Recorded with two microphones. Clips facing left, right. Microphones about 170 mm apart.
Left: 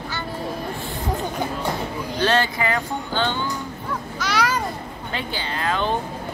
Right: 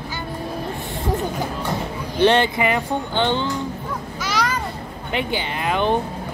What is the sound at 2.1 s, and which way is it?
Speech, 20° right (ahead or behind).